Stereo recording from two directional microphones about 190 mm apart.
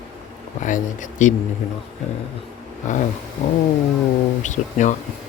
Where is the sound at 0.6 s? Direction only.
40° left (ahead or behind).